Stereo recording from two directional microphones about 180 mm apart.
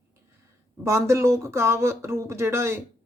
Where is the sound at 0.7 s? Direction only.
15° right (ahead or behind).